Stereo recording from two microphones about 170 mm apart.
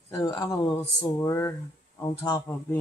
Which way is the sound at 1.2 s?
20° left (ahead or behind).